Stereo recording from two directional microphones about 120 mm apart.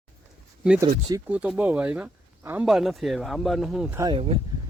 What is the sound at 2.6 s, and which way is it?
Speech, centre (ahead or behind).